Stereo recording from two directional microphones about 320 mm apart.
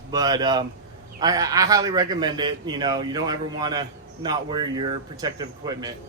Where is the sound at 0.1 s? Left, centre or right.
Centre.